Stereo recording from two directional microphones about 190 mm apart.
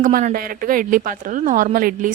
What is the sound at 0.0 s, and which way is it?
Speech, 40° right (ahead or behind).